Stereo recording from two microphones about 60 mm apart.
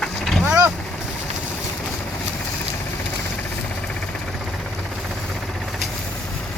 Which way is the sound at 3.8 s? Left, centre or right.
Centre.